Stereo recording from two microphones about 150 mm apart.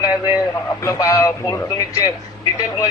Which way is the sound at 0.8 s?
20° left (ahead or behind).